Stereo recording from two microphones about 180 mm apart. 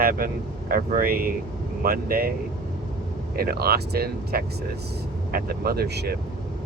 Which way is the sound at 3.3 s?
60° right (ahead or behind).